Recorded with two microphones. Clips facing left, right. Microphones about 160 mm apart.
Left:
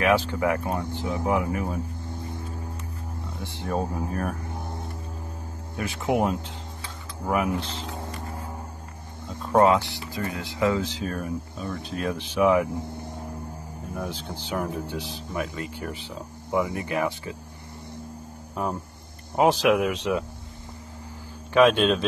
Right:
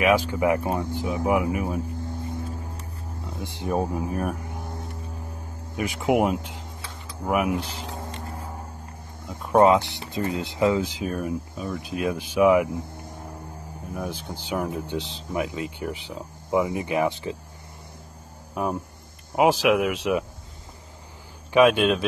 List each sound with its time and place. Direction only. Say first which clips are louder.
0.0 s speech: right 2 dB; 15° right (ahead or behind)
3.4 s speech: right 3 dB; 15° right (ahead or behind)
5.8 s speech: right 3 dB; 15° right (ahead or behind)
9.6 s speech: right 2 dB; 20° right (ahead or behind)
13.9 s speech: right 1 dB; 10° right (ahead or behind)
18.5 s speech: right 2 dB; 10° right (ahead or behind)
21.5 s speech: right 1 dB; 10° right (ahead or behind)